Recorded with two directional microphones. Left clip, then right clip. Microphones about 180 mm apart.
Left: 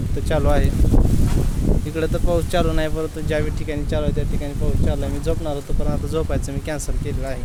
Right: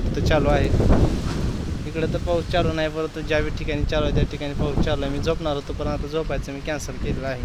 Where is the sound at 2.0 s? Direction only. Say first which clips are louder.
Left 1 dB; 40° left (ahead or behind); by 6.0 s 15° left (ahead or behind).